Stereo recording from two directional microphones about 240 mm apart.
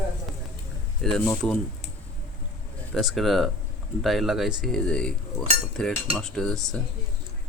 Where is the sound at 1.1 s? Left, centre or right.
Centre.